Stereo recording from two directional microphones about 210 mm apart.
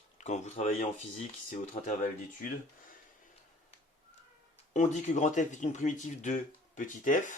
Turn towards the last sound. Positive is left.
turn(degrees=40)  # may be behind; listen again after turning